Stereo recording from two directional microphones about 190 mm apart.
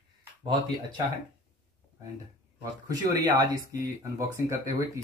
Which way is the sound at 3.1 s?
20° right (ahead or behind).